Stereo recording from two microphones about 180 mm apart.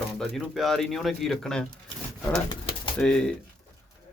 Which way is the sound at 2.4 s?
30° left (ahead or behind).